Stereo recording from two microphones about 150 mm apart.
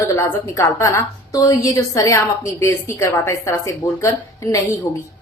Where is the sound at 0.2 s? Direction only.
20° left (ahead or behind).